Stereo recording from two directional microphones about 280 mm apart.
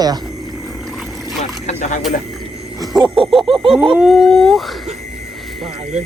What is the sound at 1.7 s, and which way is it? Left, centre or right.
Speech, left.